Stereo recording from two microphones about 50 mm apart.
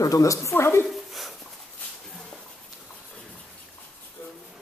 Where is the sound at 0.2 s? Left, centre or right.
Left.